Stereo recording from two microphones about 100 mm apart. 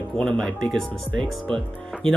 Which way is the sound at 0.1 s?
5° left (ahead or behind).